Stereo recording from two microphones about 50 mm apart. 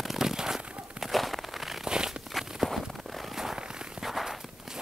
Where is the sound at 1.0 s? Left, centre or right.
Centre.